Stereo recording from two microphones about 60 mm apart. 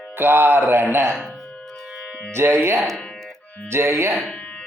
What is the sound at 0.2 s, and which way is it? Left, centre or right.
Speech, right.